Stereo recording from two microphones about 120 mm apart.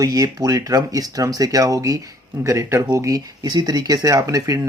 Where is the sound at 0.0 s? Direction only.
30° right (ahead or behind).